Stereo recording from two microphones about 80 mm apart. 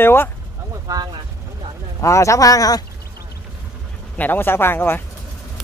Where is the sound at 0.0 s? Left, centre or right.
Left.